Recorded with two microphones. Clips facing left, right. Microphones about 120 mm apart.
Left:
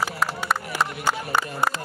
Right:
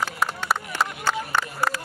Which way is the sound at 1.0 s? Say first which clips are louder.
Left 1 dB; 15° left (ahead or behind).